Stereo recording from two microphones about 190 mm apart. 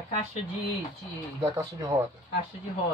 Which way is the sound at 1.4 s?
15° right (ahead or behind).